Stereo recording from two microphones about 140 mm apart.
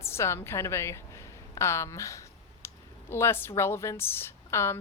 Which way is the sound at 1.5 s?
20° left (ahead or behind).